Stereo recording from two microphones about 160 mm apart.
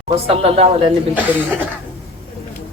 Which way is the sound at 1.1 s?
10° right (ahead or behind).